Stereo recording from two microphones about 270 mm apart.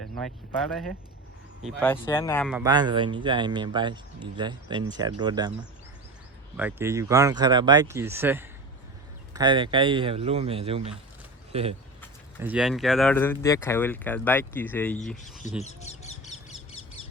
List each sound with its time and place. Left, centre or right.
1.6 s speech: centre
2.5 s speech: centre
2.7 s speech: centre
6.6 s speech: centre
12.4 s speech: centre
15.6 s speech: left